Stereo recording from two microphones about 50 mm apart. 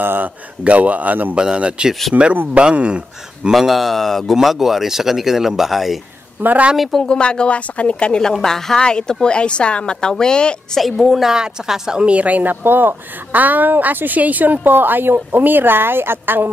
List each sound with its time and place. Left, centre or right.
0.0 s speech: right
0.7 s speech: right
1.3 s a man's voice: centre
2.1 s speech: right
2.5 s a man's voice: right
3.5 s speech: centre
6.4 s speech: right
7.0 s a woman's voice: centre
8.2 s a woman's voice: centre
10.8 s speech: centre
11.3 s speech: centre
12.1 s speech: right